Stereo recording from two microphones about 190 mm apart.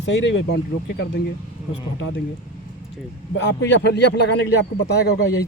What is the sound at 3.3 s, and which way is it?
A man's voice, 65° left (ahead or behind).